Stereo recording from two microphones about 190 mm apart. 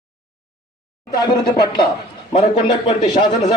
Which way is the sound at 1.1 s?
20° left (ahead or behind).